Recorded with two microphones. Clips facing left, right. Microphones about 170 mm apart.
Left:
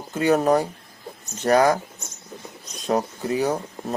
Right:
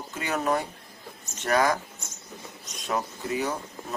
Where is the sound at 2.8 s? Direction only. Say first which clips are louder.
Left 6 dB; 35° left (ahead or behind).